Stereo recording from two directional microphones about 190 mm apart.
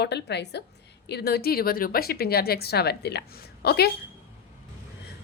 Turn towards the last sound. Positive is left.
turn(degrees=55)  # may be behind; listen again after turning